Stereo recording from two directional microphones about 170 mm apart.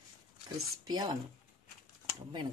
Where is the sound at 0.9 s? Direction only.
25° right (ahead or behind).